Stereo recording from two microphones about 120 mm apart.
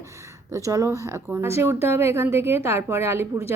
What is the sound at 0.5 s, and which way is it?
A woman's voice, 25° right (ahead or behind).